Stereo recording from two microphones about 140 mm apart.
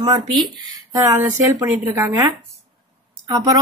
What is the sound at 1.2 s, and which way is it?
Speech, 15° right (ahead or behind).